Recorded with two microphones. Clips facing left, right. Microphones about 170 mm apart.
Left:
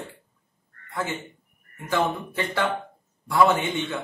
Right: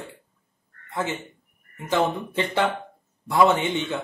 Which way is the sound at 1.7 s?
20° right (ahead or behind).